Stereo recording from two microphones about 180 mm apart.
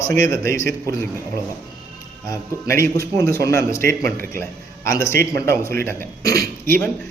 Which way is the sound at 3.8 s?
55° right (ahead or behind).